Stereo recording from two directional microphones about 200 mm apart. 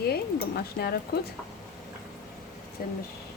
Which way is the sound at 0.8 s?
50° left (ahead or behind).